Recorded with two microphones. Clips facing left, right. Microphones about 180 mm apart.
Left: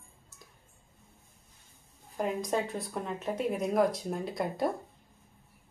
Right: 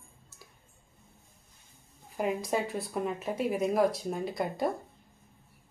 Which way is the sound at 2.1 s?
5° right (ahead or behind).